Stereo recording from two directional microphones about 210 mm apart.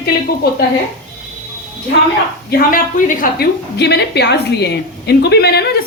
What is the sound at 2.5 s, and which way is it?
A woman's voice, 45° left (ahead or behind).